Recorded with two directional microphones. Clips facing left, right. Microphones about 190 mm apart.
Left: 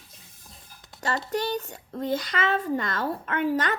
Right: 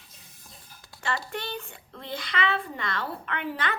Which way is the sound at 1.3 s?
40° left (ahead or behind).